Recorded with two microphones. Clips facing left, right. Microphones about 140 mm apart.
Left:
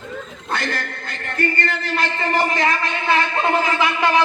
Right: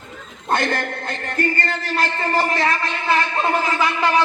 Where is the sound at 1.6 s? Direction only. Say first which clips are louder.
Even; 35° right (ahead or behind).